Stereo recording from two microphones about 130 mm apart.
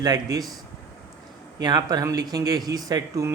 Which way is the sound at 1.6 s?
30° right (ahead or behind).